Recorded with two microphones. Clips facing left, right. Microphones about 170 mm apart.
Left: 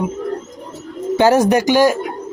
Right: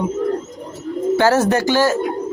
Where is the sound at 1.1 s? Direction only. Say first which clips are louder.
Left 4 dB; 15° left (ahead or behind).